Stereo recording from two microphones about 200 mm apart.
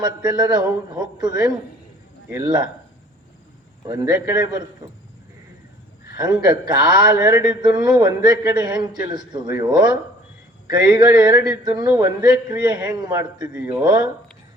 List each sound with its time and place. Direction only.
0.0 s a man's voice: 20° right (ahead or behind)
2.3 s a man's voice: 20° right (ahead or behind)
3.8 s a man's voice: 20° right (ahead or behind)
6.1 s a man's voice: 20° right (ahead or behind)